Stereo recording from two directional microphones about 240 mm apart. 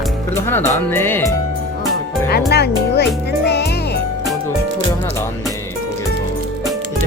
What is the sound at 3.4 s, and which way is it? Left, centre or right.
Music, left.